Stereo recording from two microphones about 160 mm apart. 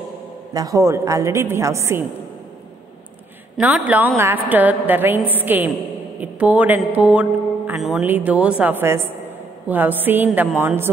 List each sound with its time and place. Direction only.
0.5 s speech: 20° right (ahead or behind)
3.5 s speech: 10° right (ahead or behind)